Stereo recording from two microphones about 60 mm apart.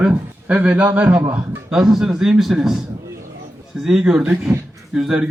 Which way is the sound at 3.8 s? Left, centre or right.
Centre.